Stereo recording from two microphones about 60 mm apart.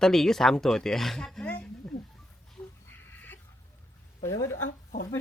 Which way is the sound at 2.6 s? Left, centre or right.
Left.